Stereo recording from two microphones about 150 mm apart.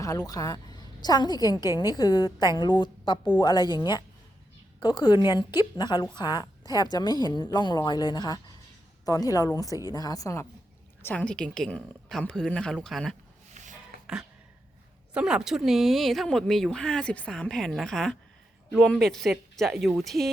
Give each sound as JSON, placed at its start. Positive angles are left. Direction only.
{"t": 0.0, "sound": "a woman's voice", "side_deg": 25}
{"t": 11.0, "sound": "speech", "side_deg": 10}
{"t": 13.5, "sound": "a sound", "side_deg": -55}
{"t": 15.1, "sound": "speech", "side_deg": -5}